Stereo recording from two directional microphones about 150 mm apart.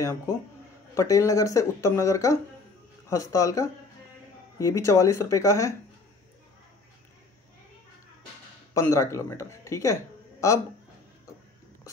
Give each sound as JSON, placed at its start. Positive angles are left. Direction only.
{"t": 0.0, "sound": "speech", "side_deg": 20}
{"t": 8.7, "sound": "speech", "side_deg": 20}